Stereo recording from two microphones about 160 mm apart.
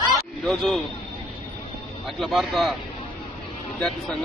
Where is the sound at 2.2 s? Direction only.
Centre (ahead or behind).